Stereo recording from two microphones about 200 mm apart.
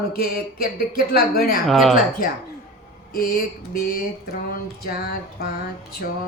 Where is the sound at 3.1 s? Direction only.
50° left (ahead or behind).